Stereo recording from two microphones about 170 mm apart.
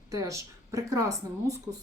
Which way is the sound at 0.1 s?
20° right (ahead or behind).